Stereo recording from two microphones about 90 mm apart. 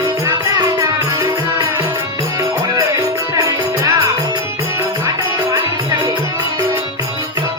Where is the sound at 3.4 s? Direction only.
40° right (ahead or behind).